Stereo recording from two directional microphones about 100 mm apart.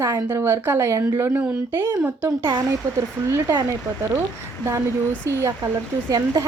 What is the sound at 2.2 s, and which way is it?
Speech, 40° right (ahead or behind).